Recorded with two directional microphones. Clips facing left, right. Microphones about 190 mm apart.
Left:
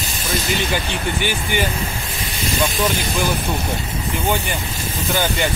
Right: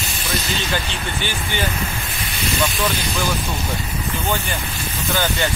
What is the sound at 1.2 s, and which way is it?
Speech, 10° left (ahead or behind).